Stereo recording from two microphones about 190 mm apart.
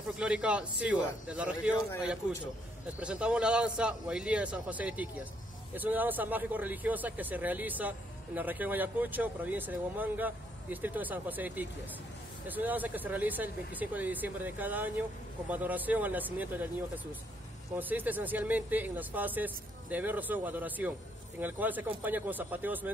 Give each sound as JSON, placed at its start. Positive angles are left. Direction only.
{"t": 0.2, "sound": "speech", "side_deg": -5}
{"t": 3.0, "sound": "a man's voice", "side_deg": -5}
{"t": 17.7, "sound": "speech", "side_deg": -10}